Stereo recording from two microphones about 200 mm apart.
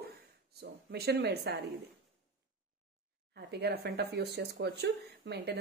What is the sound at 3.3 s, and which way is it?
A woman's voice, 55° right (ahead or behind).